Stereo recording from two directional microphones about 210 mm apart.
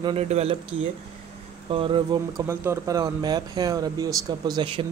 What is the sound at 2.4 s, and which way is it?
Speech, 10° right (ahead or behind).